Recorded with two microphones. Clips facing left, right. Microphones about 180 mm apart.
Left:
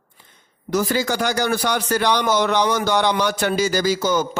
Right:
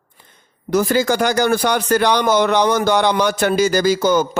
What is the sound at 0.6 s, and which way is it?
Speech, 55° right (ahead or behind).